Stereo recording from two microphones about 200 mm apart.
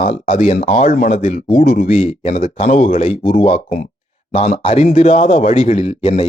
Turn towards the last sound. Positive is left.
turn(degrees=30)  # may be behind; listen again after turning